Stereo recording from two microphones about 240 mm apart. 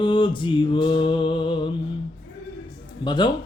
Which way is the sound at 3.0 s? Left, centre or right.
Centre.